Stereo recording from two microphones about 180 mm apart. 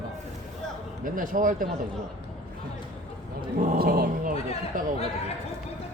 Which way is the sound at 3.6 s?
55° right (ahead or behind).